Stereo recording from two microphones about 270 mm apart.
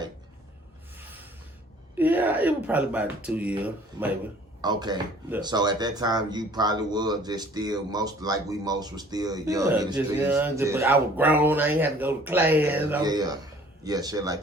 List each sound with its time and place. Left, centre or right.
0.9 s a sound: centre
2.0 s speech: centre
4.6 s speech: centre